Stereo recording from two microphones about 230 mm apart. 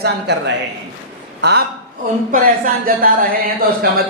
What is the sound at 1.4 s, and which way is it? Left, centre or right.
A woman's voice, right.